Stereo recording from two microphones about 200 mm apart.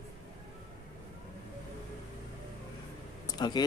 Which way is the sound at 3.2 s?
20° left (ahead or behind).